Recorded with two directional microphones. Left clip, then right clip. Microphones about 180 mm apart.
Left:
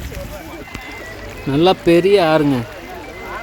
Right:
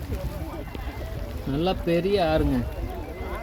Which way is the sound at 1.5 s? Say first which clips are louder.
Left 12 dB; 50° left (ahead or behind).